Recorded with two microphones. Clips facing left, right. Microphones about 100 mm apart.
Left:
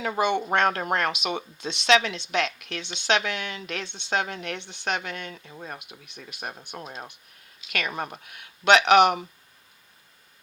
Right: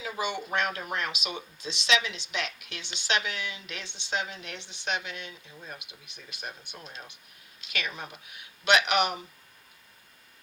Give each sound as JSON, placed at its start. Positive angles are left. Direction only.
{"t": 0.0, "sound": "speech", "side_deg": 60}